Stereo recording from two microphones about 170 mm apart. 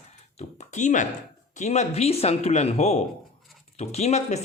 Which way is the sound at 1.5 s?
40° left (ahead or behind).